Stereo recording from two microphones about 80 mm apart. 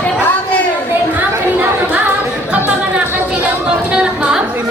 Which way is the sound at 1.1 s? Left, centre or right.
Centre.